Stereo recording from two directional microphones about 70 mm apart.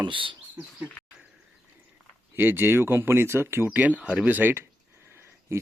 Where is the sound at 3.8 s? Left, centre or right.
Centre.